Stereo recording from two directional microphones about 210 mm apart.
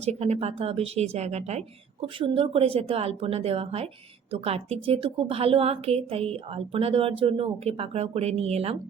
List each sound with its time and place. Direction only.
0.0 s a woman's voice: 30° right (ahead or behind)